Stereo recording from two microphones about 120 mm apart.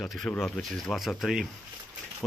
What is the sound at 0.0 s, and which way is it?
Speech, 5° left (ahead or behind).